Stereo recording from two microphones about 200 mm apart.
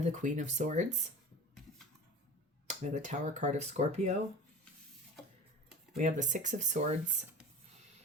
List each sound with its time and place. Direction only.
0.0 s speech: 35° right (ahead or behind)
2.6 s speech: 35° right (ahead or behind)
6.0 s speech: 35° right (ahead or behind)